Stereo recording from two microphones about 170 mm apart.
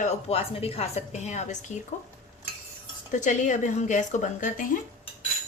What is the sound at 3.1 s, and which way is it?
A woman's voice, 45° left (ahead or behind).